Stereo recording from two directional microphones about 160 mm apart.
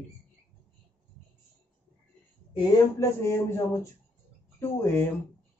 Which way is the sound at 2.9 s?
15° left (ahead or behind).